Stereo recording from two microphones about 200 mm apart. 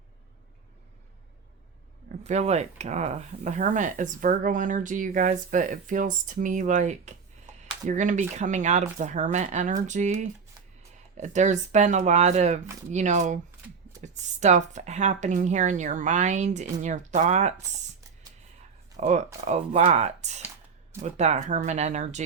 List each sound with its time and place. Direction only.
2.2 s speech: 35° right (ahead or behind)
18.9 s speech: 35° right (ahead or behind)